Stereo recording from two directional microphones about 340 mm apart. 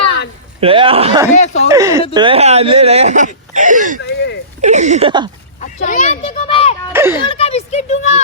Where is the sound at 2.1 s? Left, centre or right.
Centre.